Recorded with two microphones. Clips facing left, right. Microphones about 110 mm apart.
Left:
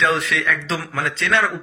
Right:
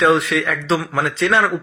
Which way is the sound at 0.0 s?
30° right (ahead or behind).